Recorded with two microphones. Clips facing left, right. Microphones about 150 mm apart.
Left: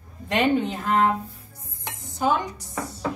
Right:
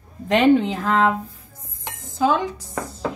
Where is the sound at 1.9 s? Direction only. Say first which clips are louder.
Right 4 dB; 90° right.